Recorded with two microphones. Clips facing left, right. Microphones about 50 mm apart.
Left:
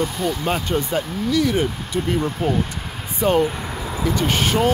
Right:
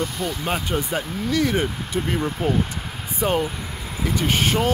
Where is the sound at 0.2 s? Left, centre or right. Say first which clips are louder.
Left 3 dB; centre.